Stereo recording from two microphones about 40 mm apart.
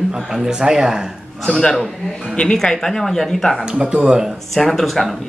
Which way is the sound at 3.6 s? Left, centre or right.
Right.